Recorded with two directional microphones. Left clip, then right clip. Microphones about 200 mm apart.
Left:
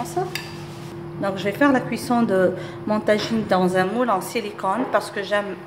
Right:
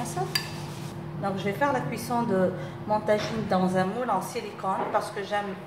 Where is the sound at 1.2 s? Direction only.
50° left (ahead or behind).